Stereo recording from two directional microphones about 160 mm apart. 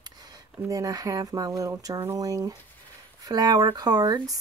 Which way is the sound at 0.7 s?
20° right (ahead or behind).